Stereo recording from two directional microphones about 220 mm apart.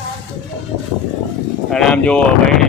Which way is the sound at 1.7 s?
5° left (ahead or behind).